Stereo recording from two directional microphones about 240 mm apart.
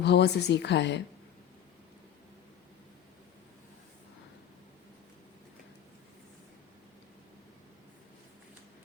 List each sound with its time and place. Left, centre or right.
0.0 s a woman's voice: left